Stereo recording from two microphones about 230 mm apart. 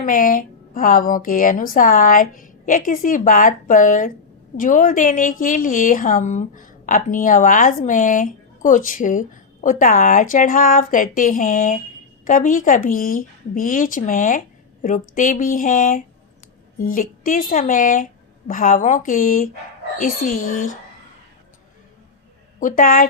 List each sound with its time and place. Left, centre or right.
0.0 s a woman's voice: left
22.6 s a woman's voice: left